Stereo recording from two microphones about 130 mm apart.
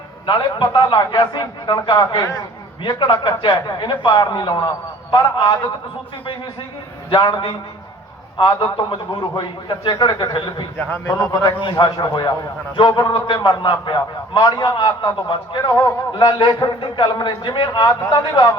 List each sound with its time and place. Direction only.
0.3 s a man's voice: 35° left (ahead or behind)
7.1 s a man's voice: 35° left (ahead or behind)
10.8 s a man's voice: 15° left (ahead or behind)
11.6 s a man's voice: 35° left (ahead or behind)